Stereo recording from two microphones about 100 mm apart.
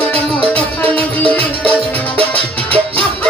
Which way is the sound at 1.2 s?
15° left (ahead or behind).